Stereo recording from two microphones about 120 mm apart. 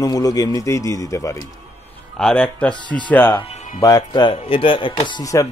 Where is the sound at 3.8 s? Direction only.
35° left (ahead or behind).